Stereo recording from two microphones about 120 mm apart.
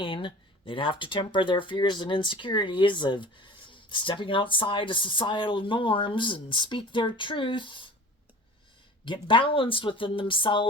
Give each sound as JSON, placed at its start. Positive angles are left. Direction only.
{"t": 0.0, "sound": "speech", "side_deg": 45}
{"t": 9.0, "sound": "speech", "side_deg": 45}